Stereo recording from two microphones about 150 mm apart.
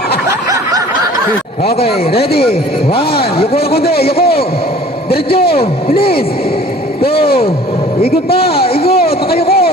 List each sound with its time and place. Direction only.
0.3 s snicker: 25° right (ahead or behind)
2.3 s a man's voice: 90° left
8.0 s a man's voice: 90° left
9.0 s a sound: 90° left